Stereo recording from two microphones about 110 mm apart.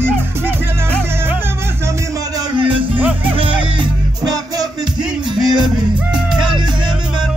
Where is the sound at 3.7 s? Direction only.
35° right (ahead or behind).